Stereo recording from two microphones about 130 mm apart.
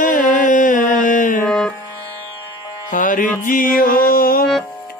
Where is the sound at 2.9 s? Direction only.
90° left.